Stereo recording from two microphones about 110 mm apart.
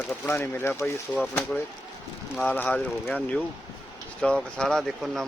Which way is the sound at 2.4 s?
15° left (ahead or behind).